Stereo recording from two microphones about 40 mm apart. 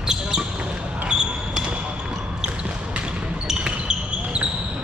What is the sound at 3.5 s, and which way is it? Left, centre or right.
Basketball bounce, right.